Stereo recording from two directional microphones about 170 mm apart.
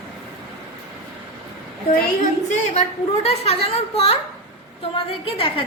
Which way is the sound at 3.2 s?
40° left (ahead or behind).